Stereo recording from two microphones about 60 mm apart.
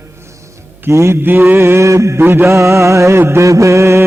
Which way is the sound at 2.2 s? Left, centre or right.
Right.